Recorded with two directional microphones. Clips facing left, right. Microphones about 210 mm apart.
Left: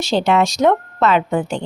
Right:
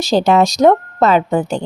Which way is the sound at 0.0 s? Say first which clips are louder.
Right 3 dB; 40° right (ahead or behind).